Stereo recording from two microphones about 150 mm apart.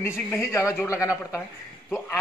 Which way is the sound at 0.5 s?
20° left (ahead or behind).